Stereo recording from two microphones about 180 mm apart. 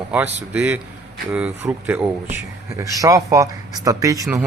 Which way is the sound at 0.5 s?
10° right (ahead or behind).